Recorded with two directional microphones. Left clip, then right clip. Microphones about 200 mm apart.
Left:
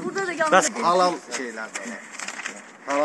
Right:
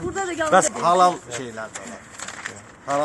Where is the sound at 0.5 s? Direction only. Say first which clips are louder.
Right 2 dB; centre (ahead or behind).